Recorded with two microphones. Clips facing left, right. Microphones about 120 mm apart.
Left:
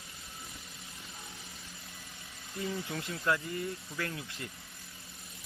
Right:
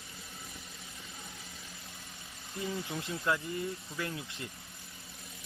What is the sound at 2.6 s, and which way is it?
Speech, 20° right (ahead or behind).